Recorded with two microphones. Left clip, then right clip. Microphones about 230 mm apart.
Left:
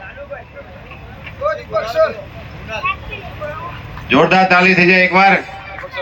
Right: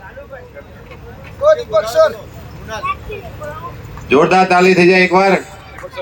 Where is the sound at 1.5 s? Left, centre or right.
Right.